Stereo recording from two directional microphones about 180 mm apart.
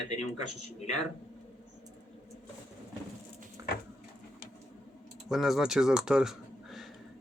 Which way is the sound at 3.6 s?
15° right (ahead or behind).